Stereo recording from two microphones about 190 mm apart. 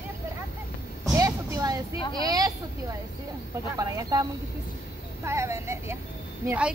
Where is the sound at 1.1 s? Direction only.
15° right (ahead or behind).